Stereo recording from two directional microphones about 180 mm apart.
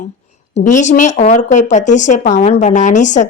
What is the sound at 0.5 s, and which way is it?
A woman's voice, 40° left (ahead or behind).